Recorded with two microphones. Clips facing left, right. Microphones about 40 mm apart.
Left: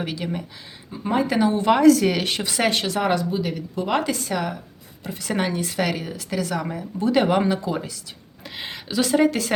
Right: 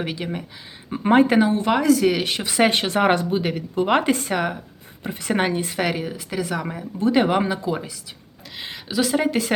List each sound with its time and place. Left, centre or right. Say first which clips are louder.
0.0 s speech: even; centre
0.9 s speech: right 7 dB; right
1.5 s speech: left 3 dB; centre
2.6 s speech: right 2 dB; right
5.7 s speech: right 1 dB; centre